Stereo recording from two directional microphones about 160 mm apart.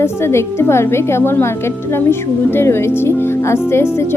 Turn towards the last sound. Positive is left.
turn(degrees=15)  # may be behind; listen again after turning